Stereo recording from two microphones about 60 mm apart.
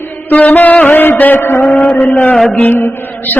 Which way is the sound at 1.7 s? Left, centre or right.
Centre.